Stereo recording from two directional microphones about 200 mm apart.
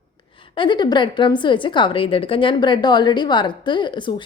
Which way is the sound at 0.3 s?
25° left (ahead or behind).